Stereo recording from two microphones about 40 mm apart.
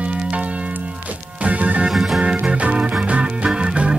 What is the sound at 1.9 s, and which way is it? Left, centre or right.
Music, centre.